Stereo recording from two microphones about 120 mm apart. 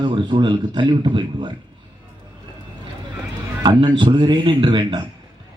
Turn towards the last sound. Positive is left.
turn(degrees=-40)  # may be behind; listen again after turning